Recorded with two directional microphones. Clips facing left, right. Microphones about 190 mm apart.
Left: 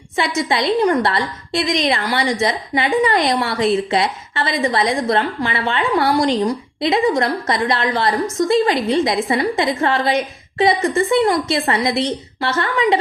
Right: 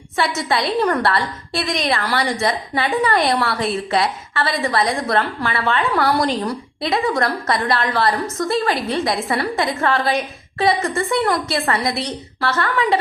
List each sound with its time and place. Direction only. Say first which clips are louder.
0.2 s a woman's voice: left 1 dB; 20° left (ahead or behind)